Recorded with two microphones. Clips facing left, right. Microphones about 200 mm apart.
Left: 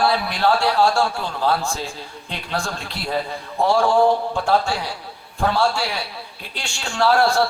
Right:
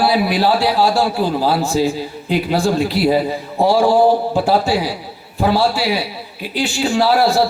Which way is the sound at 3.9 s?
35° right (ahead or behind).